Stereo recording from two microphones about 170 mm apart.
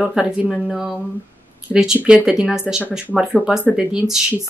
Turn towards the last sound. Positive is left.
turn(degrees=-5)  # may be behind; listen again after turning